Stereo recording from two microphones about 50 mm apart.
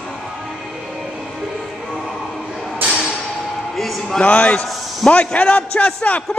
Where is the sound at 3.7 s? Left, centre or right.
Centre.